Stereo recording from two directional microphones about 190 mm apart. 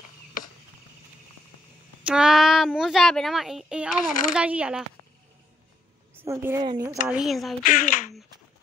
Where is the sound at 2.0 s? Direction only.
5° right (ahead or behind).